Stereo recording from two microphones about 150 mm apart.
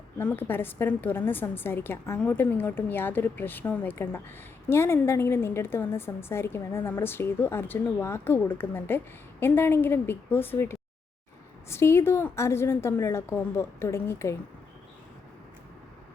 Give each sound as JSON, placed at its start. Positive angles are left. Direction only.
{"t": 0.2, "sound": "a woman's voice", "side_deg": 10}